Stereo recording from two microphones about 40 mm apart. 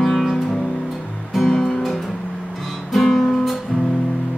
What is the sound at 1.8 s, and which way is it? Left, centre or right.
Music, centre.